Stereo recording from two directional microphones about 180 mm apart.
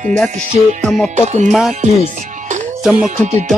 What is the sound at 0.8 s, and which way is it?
Music, centre (ahead or behind).